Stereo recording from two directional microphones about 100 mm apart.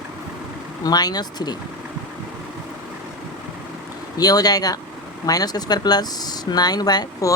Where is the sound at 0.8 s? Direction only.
40° left (ahead or behind).